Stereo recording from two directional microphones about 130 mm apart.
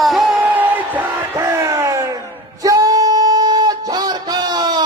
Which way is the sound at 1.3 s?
25° right (ahead or behind).